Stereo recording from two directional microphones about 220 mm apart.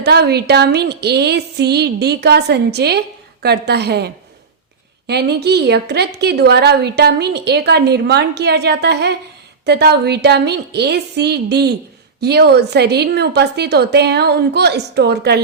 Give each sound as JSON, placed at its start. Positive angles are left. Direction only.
{"t": 0.0, "sound": "a woman's voice", "side_deg": -50}